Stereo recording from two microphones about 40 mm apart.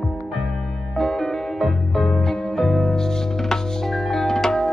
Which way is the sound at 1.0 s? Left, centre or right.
Centre.